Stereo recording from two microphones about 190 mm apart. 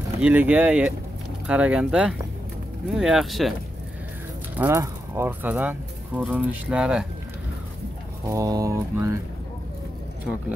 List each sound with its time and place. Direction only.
0.2 s speech: 10° right (ahead or behind)
4.6 s speech: 10° right (ahead or behind)
8.3 s speech: 20° right (ahead or behind)